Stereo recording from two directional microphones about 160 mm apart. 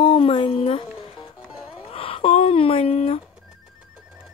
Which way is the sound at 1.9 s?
35° left (ahead or behind).